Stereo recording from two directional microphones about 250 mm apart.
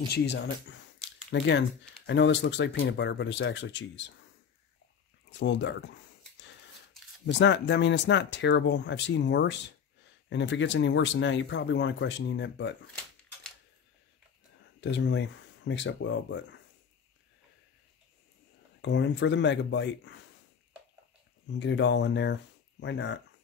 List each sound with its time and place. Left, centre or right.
0.1 s speech: left
5.3 s speech: left
7.2 s speech: left
14.8 s speech: left
18.8 s speech: left
21.5 s speech: left